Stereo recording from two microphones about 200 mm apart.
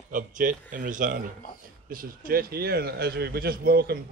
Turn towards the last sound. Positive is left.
turn(degrees=-50)  # may be behind; listen again after turning